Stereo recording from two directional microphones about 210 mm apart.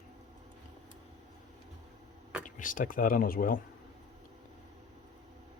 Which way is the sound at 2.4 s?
40° left (ahead or behind).